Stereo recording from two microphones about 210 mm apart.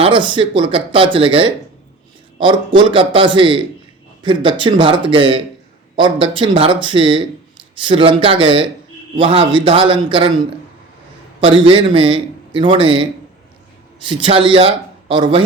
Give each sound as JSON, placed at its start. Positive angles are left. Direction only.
{"t": 0.0, "sound": "a man's voice", "side_deg": -25}
{"t": 11.3, "sound": "a man's voice", "side_deg": -25}